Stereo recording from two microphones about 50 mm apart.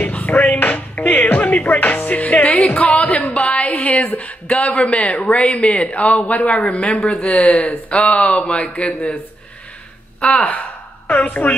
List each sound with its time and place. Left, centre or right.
0.0 s music: left
2.6 s a woman's voice: left
10.3 s a woman's voice: left